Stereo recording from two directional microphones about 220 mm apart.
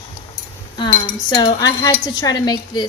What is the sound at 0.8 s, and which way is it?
Cutlery, 20° left (ahead or behind).